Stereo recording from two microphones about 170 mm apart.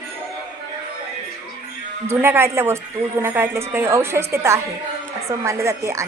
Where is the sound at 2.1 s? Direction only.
15° right (ahead or behind).